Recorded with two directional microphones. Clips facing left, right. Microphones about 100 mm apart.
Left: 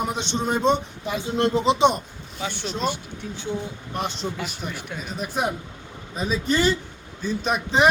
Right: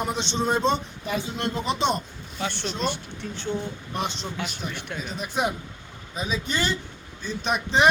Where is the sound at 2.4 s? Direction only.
5° left (ahead or behind).